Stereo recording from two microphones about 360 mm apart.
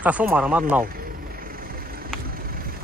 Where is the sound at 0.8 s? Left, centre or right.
Right.